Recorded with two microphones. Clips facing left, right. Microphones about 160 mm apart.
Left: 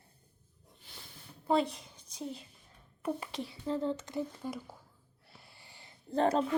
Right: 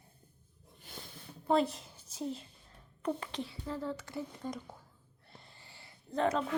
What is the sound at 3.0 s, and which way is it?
Speech, 10° left (ahead or behind).